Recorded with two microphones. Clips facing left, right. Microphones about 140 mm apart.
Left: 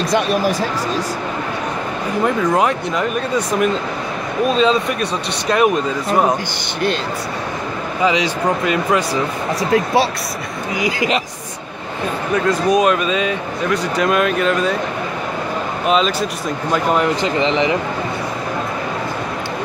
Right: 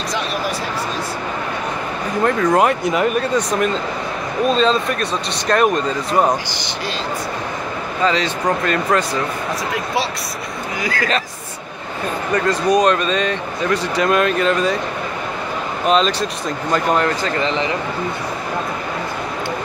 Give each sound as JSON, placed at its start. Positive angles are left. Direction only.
{"t": 2.2, "sound": "speech", "side_deg": 0}
{"t": 4.5, "sound": "speech", "side_deg": 5}
{"t": 8.0, "sound": "speech", "side_deg": 10}
{"t": 10.8, "sound": "speech", "side_deg": 20}
{"t": 12.4, "sound": "speech", "side_deg": 0}
{"t": 15.9, "sound": "speech", "side_deg": 5}
{"t": 17.2, "sound": "speech", "side_deg": 20}